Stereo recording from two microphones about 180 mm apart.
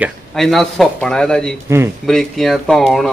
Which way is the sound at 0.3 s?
Centre (ahead or behind).